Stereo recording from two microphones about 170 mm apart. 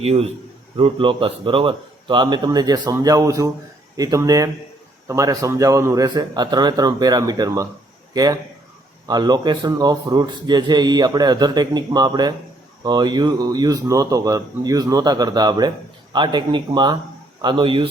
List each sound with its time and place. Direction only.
0.0 s a man's voice: 35° right (ahead or behind)